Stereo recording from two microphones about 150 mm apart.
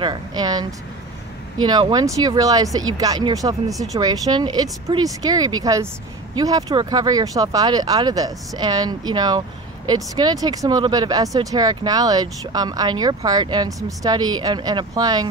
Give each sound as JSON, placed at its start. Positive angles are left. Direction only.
{"t": 0.0, "sound": "speech", "side_deg": -30}